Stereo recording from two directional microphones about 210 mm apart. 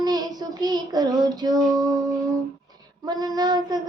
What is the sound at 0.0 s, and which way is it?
Child singing, 20° right (ahead or behind).